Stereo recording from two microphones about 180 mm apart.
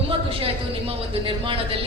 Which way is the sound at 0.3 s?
30° right (ahead or behind).